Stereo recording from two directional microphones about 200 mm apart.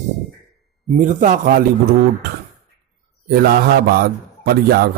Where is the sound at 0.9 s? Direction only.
40° right (ahead or behind).